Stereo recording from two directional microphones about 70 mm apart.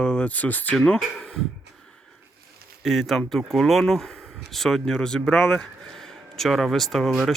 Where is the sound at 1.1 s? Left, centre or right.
Centre.